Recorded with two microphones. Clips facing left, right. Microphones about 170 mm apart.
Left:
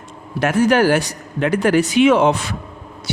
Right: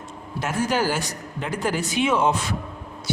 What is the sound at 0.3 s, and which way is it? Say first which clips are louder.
Speech: left 9 dB; 70° left (ahead or behind).